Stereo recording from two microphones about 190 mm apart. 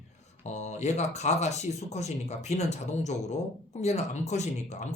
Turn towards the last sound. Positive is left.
turn(degrees=35)  # may be behind; listen again after turning